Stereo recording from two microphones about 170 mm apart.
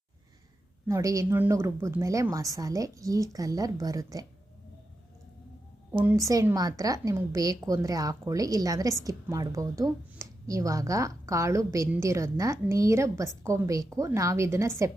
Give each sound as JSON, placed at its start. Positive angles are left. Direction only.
{"t": 0.9, "sound": "a woman's voice", "side_deg": -20}
{"t": 6.1, "sound": "a woman's voice", "side_deg": -20}